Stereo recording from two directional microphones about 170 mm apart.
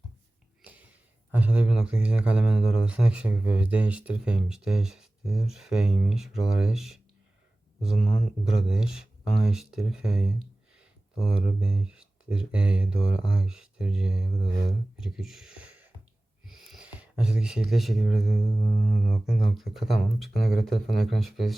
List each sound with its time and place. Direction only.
0.6 s speech: 10° right (ahead or behind)